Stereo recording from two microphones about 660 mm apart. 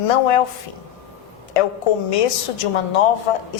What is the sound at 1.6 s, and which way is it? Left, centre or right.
Music, left.